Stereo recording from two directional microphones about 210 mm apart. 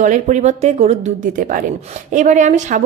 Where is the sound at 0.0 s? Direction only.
35° right (ahead or behind).